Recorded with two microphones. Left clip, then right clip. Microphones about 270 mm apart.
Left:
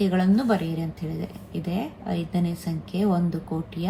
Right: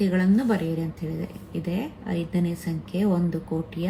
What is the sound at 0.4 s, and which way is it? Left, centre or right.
A woman's voice, centre.